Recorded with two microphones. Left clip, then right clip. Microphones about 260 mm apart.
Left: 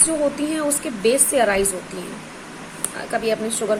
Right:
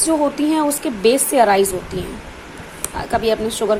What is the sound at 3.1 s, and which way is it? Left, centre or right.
Speech, centre.